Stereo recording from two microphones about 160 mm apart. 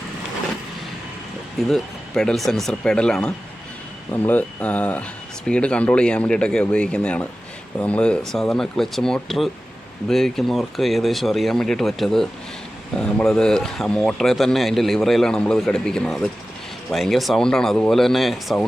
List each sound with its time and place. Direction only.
1.6 s speech: 5° left (ahead or behind)